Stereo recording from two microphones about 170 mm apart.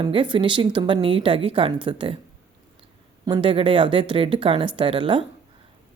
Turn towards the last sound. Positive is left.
turn(degrees=-30)  # may be behind; listen again after turning